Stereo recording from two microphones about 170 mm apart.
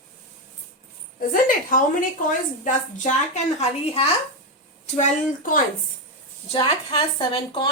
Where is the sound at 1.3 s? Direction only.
55° left (ahead or behind); by 4.1 s 35° left (ahead or behind).